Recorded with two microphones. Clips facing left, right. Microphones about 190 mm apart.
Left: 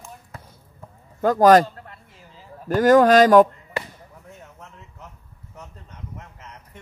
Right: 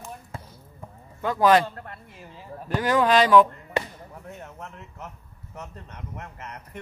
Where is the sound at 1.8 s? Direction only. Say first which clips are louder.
Right 3 dB; 60° right (ahead or behind).